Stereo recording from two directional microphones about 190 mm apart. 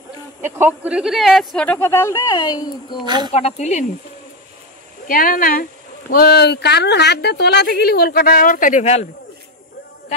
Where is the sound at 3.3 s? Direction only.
35° left (ahead or behind).